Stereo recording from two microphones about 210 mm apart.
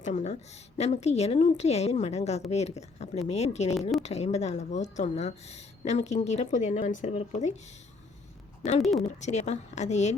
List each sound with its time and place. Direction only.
0.0 s speech: 35° left (ahead or behind)
8.8 s speech: centre (ahead or behind)
9.2 s speech: 35° left (ahead or behind)